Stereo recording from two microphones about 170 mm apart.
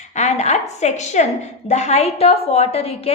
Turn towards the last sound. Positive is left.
turn(degrees=35)  # may be behind; listen again after turning